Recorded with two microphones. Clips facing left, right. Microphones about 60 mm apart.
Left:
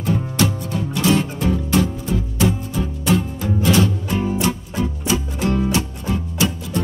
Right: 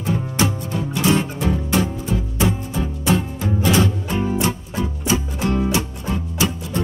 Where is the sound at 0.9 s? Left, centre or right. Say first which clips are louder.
Left 1 dB; right.